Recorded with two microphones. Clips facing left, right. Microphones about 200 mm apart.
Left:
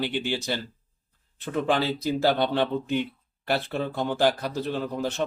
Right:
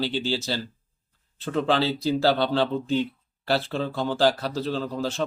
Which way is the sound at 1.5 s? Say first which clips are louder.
Right 1 dB; 15° left (ahead or behind).